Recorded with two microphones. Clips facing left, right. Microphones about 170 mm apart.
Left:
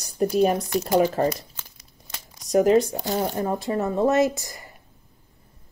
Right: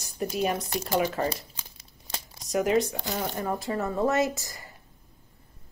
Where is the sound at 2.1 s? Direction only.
30° right (ahead or behind).